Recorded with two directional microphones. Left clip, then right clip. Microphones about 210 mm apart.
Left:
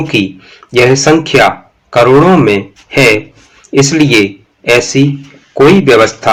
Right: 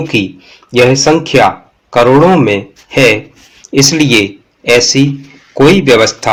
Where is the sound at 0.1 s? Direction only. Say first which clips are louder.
Left 1 dB; 25° right (ahead or behind).